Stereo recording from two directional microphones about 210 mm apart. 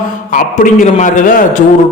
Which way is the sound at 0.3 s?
35° left (ahead or behind).